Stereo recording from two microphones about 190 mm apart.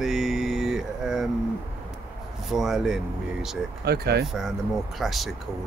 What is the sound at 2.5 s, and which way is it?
Speech, centre (ahead or behind).